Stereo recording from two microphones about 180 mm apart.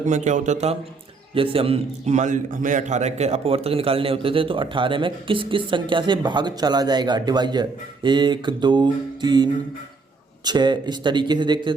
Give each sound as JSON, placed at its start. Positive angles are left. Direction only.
{"t": 0.0, "sound": "a man's voice", "side_deg": -40}